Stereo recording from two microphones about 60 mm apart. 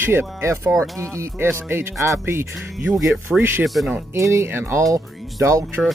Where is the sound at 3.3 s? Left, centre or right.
Centre.